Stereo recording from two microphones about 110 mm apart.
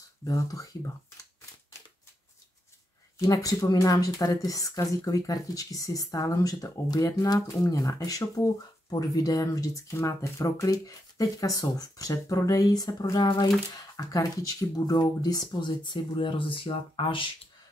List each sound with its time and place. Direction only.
0.2 s speech: 30° left (ahead or behind)
3.2 s speech: 30° left (ahead or behind); by 17.3 s 50° left (ahead or behind)